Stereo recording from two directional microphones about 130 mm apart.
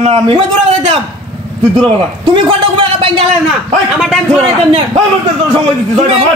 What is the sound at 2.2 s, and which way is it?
A man's voice, 45° right (ahead or behind).